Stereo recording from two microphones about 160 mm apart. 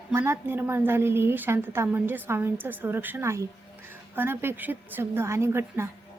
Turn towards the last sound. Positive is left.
turn(degrees=-15)  # may be behind; listen again after turning